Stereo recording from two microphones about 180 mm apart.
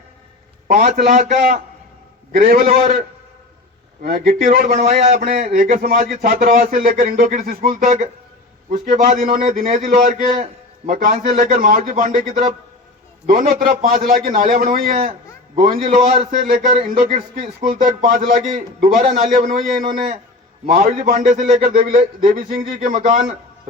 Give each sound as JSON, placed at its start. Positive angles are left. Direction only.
{"t": 0.7, "sound": "a man's voice", "side_deg": -45}
{"t": 2.6, "sound": "a man's voice", "side_deg": -35}
{"t": 4.0, "sound": "a man's voice", "side_deg": -55}
{"t": 20.7, "sound": "a man's voice", "side_deg": -40}